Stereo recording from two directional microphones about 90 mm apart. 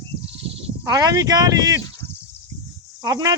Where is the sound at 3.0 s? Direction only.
40° right (ahead or behind).